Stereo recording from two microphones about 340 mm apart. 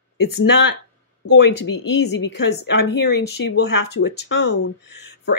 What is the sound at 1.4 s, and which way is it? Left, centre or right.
Speech, left.